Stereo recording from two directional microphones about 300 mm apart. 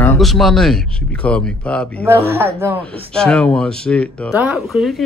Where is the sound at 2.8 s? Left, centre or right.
Centre.